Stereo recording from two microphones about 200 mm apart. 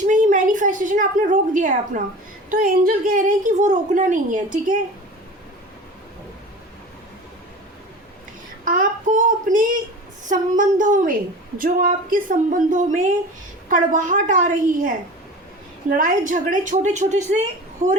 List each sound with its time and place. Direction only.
0.0 s a sound: 40° right (ahead or behind)
2.5 s a woman's voice: 45° right (ahead or behind)
8.6 s a woman's voice: 40° right (ahead or behind)